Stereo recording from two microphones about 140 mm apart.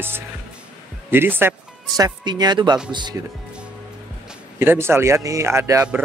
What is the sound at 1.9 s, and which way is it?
A man's voice, 25° right (ahead or behind).